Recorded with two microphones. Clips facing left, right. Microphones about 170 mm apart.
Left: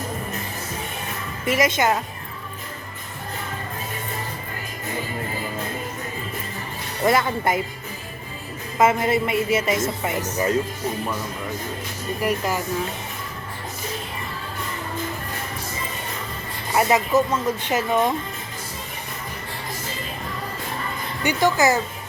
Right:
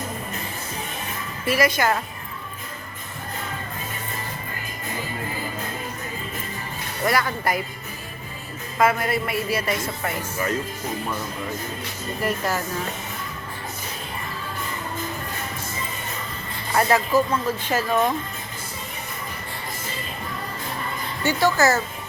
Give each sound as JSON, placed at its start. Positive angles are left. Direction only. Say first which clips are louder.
{"t": 1.5, "sound": "speech", "louder": "left 1 dB", "side_deg": 20}
{"t": 7.0, "sound": "speech", "louder": "left 3 dB", "side_deg": 20}
{"t": 8.8, "sound": "speech", "louder": "left 2 dB", "side_deg": 25}
{"t": 12.2, "sound": "speech", "louder": "left 1 dB", "side_deg": 15}
{"t": 16.7, "sound": "speech", "louder": "left 1 dB", "side_deg": 20}
{"t": 21.2, "sound": "speech", "louder": "left 1 dB", "side_deg": 15}